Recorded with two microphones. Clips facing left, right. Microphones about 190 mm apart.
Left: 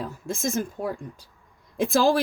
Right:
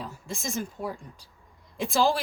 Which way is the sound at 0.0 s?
50° left (ahead or behind).